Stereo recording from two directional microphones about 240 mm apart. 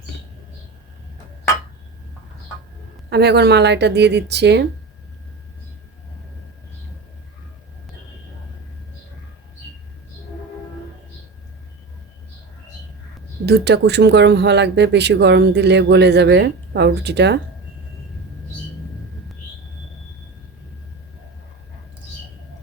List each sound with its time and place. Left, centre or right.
3.1 s speech: right
13.4 s speech: right